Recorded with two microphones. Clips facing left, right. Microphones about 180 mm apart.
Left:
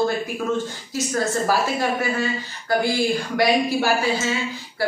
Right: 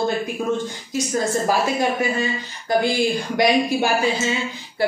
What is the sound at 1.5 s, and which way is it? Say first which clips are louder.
A woman's voice: right 1 dB; 20° right (ahead or behind).